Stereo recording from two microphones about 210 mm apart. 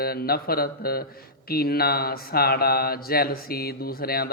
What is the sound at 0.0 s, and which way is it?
A man's voice, 45° left (ahead or behind).